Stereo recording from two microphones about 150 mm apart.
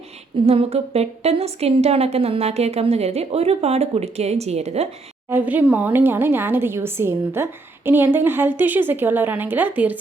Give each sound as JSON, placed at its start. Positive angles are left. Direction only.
{"t": 0.4, "sound": "a woman's voice", "side_deg": -45}
{"t": 5.3, "sound": "a woman's voice", "side_deg": -10}